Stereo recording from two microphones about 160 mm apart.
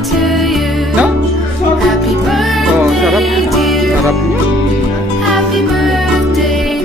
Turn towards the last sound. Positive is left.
turn(degrees=0)  # may be behind; listen again after turning